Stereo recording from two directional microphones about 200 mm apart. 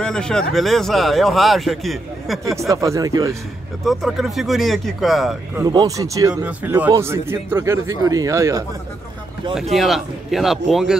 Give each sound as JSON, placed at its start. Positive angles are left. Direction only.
{"t": 0.0, "sound": "speech", "side_deg": 5}
{"t": 2.7, "sound": "speech", "side_deg": -15}
{"t": 3.8, "sound": "speech", "side_deg": 0}
{"t": 5.6, "sound": "speech", "side_deg": -20}
{"t": 9.8, "sound": "speech", "side_deg": 0}